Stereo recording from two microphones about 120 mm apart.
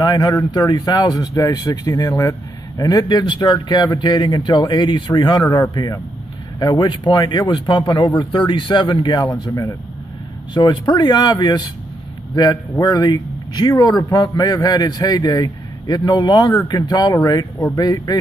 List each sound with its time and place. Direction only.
0.1 s a man's voice: 35° left (ahead or behind)
10.5 s a man's voice: 40° left (ahead or behind)
12.7 s a man's voice: 30° left (ahead or behind)